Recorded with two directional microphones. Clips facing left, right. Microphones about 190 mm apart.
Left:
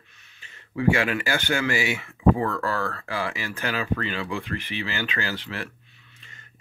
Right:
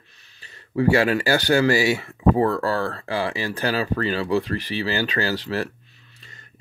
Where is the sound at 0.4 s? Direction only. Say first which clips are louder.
Right 6 dB; 35° right (ahead or behind).